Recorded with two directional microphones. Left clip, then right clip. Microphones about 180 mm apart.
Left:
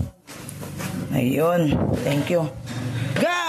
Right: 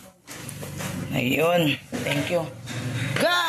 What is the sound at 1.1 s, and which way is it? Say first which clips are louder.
Speech: left 1 dB; 30° left (ahead or behind).